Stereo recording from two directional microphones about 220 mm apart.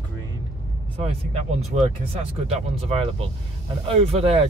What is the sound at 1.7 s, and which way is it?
Speech, 30° right (ahead or behind).